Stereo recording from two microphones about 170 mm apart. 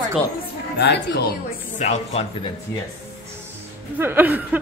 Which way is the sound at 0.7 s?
85° left.